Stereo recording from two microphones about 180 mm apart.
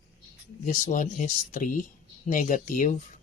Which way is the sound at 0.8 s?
45° left (ahead or behind).